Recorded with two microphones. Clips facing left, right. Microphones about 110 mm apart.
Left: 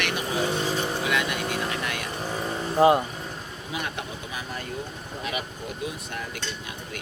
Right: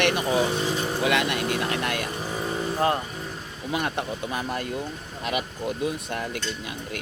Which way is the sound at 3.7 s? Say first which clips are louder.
Right 5 dB; 55° right (ahead or behind).